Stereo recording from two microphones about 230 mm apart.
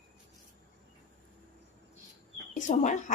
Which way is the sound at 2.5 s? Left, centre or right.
Left.